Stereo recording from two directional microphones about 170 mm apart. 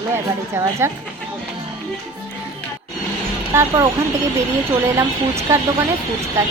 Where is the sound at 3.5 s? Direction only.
15° right (ahead or behind).